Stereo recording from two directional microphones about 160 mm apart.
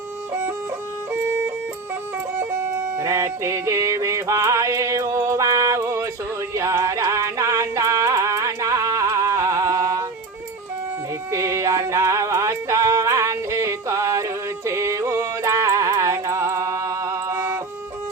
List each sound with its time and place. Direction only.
3.0 s music: 20° right (ahead or behind)
11.3 s music: 20° right (ahead or behind)